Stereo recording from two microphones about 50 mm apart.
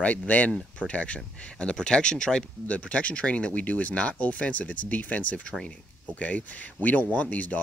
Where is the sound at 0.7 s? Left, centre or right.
Left.